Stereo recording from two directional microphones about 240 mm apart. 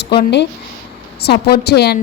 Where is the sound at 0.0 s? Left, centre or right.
Left.